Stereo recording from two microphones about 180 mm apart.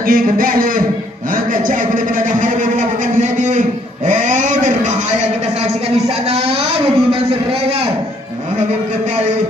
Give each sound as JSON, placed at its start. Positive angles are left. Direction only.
{"t": 0.1, "sound": "a man's voice", "side_deg": -50}
{"t": 4.1, "sound": "a sound", "side_deg": -45}
{"t": 6.0, "sound": "speech", "side_deg": -35}